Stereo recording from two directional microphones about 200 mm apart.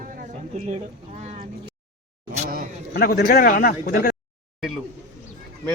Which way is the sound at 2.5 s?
45° right (ahead or behind).